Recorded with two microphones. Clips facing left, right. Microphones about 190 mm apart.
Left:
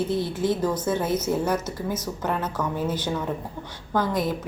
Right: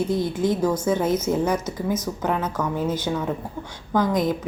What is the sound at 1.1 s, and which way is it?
Speech, 10° left (ahead or behind).